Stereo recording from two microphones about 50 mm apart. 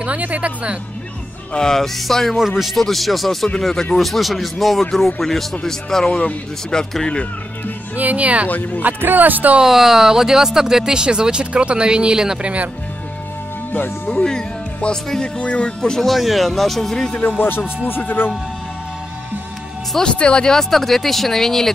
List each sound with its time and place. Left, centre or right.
0.0 s speech: right
1.5 s speech: centre
7.9 s speech: right
8.5 s speech: left
8.8 s speech: right
9.6 s speech: centre; by 12.6 s right
13.7 s speech: left
14.0 s speech: centre
15.3 s speech: left
16.0 s speech: centre
17.4 s speech: left
20.0 s speech: centre
20.7 s speech: centre